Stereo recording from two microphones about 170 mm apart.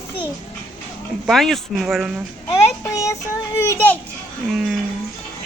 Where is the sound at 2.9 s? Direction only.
20° left (ahead or behind).